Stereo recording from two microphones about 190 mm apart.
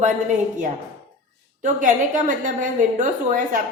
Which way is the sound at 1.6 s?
40° right (ahead or behind).